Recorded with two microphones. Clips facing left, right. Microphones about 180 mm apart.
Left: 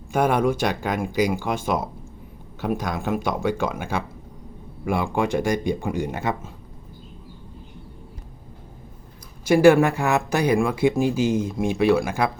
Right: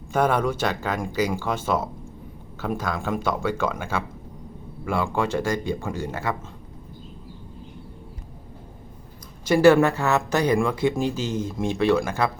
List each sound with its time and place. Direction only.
0.1 s speech: 10° left (ahead or behind)
9.5 s speech: 10° left (ahead or behind)